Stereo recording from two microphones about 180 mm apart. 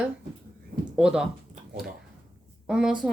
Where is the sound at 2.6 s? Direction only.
5° right (ahead or behind).